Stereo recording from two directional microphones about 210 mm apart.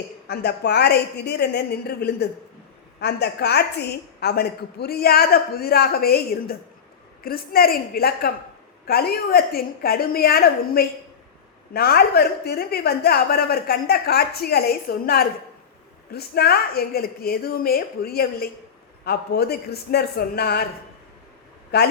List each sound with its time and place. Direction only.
0.3 s a woman's voice: 50° left (ahead or behind)
21.7 s a woman's voice: 50° left (ahead or behind)